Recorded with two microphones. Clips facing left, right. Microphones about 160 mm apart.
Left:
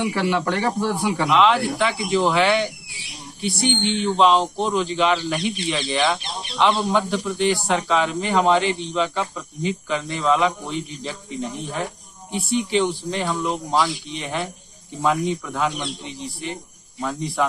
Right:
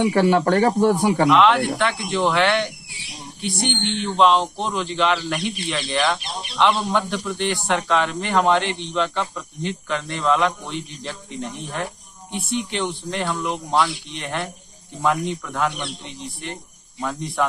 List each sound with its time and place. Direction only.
0.0 s speech: 45° right (ahead or behind)
1.3 s speech: 5° left (ahead or behind)
4.0 s speech: centre (ahead or behind)
17.0 s speech: centre (ahead or behind)